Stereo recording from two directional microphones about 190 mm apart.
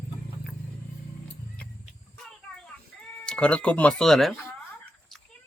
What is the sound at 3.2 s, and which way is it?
Speech, 5° left (ahead or behind).